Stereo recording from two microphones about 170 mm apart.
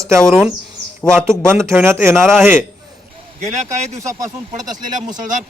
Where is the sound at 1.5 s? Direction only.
15° right (ahead or behind).